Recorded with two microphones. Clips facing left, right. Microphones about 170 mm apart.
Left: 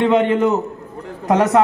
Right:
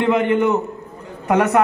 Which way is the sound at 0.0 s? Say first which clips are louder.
Left 2 dB; 25° left (ahead or behind).